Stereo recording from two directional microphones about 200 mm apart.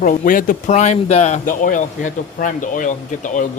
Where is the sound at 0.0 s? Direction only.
40° left (ahead or behind).